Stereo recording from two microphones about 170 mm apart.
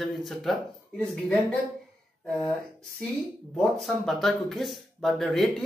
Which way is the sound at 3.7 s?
Centre (ahead or behind).